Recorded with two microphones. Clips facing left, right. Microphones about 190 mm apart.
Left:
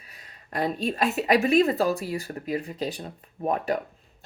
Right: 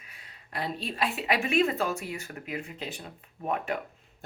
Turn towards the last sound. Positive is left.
turn(degrees=35)  # may be behind; listen again after turning